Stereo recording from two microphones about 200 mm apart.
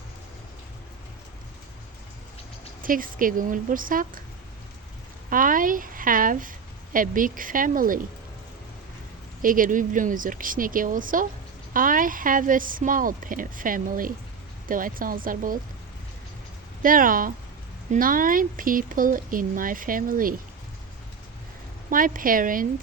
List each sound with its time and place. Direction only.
2.8 s a woman's voice: 45° right (ahead or behind)
5.3 s a woman's voice: 45° right (ahead or behind)
9.4 s a woman's voice: 45° right (ahead or behind)
16.8 s a woman's voice: 45° right (ahead or behind)
21.8 s a woman's voice: 45° right (ahead or behind)